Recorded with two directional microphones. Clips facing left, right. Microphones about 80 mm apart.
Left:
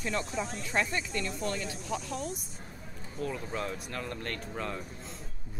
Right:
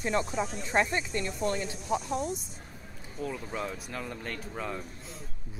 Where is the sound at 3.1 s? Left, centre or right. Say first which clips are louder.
Even; centre.